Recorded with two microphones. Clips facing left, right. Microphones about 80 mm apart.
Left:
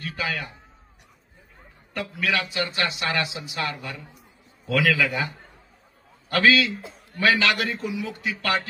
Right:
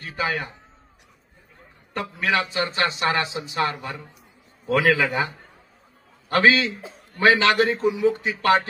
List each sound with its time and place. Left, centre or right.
0.0 s a man's voice: right
2.0 s a man's voice: right